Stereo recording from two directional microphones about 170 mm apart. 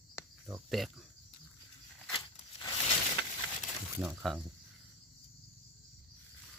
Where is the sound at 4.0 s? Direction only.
5° right (ahead or behind).